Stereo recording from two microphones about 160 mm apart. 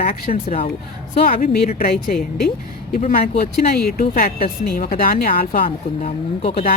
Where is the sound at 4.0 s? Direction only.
60° left (ahead or behind).